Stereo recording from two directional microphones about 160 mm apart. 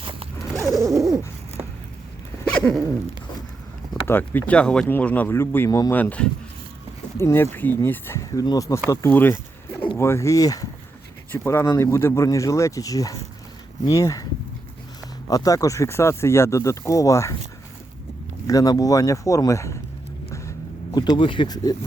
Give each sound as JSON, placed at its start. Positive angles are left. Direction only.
{"t": 0.8, "sound": "bird", "side_deg": -20}
{"t": 2.4, "sound": "a sound", "side_deg": 10}
{"t": 4.0, "sound": "speech", "side_deg": 15}
{"t": 15.3, "sound": "speech", "side_deg": 20}
{"t": 18.4, "sound": "speech", "side_deg": 25}
{"t": 20.9, "sound": "speech", "side_deg": 25}